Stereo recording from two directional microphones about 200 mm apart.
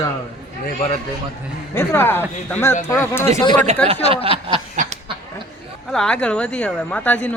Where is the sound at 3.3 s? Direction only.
20° left (ahead or behind).